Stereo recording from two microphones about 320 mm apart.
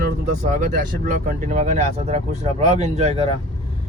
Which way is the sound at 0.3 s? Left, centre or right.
Right.